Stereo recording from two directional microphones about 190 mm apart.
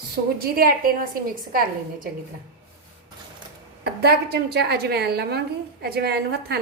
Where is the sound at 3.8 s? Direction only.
60° right (ahead or behind).